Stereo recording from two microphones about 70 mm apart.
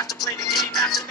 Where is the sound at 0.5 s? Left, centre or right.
Centre.